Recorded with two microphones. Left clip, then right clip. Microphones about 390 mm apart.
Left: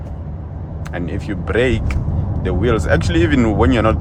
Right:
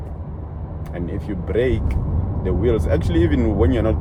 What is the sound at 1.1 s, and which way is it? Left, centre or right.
Speech, left.